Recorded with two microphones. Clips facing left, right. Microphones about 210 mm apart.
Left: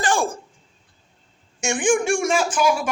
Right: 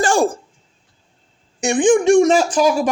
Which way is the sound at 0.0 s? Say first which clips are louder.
Right 6 dB; 40° right (ahead or behind).